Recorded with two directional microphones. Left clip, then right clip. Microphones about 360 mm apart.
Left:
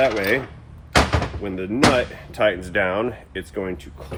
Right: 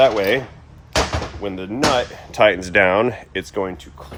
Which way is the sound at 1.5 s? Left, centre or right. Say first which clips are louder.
Even; centre.